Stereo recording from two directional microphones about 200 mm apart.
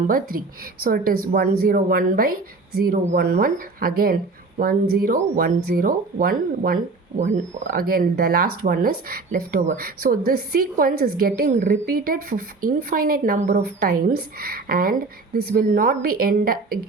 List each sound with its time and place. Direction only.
0.1 s a woman's voice: 45° right (ahead or behind)
7.8 s a woman's voice: 45° right (ahead or behind)